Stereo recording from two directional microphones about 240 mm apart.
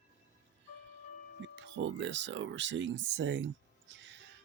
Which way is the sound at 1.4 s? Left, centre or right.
Right.